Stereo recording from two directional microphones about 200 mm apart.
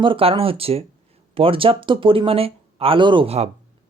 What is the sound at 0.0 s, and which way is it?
Speech, 25° right (ahead or behind).